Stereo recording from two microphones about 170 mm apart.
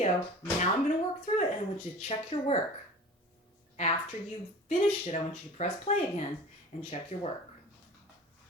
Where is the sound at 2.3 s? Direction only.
30° left (ahead or behind).